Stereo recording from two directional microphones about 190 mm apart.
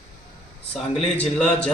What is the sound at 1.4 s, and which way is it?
Speech, 5° left (ahead or behind).